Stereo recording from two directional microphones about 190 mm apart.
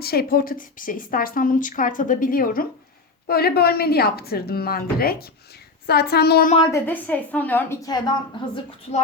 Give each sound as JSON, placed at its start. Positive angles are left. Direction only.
{"t": 0.0, "sound": "a woman's voice", "side_deg": 55}
{"t": 6.7, "sound": "a woman's voice", "side_deg": 10}